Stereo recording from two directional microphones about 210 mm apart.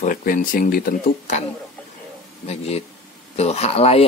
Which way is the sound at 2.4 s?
30° left (ahead or behind).